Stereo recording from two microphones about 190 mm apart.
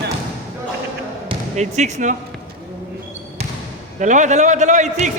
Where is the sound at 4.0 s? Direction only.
40° right (ahead or behind).